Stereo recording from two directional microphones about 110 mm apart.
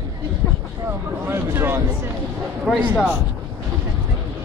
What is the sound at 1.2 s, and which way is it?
Speech, 20° right (ahead or behind).